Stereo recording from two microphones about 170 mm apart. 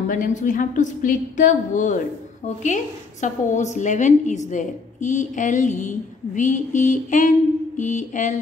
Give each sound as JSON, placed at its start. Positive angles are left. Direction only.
{"t": 0.1, "sound": "a woman's voice", "side_deg": 50}